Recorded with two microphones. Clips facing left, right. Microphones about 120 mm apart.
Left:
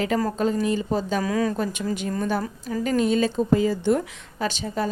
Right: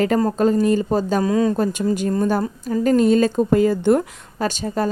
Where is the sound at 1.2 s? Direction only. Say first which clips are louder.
Right 6 dB; 25° right (ahead or behind).